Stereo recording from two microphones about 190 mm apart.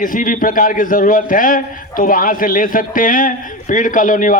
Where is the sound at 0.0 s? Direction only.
45° left (ahead or behind).